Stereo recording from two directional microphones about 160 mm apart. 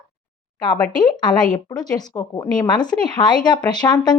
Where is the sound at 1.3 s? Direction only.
5° left (ahead or behind).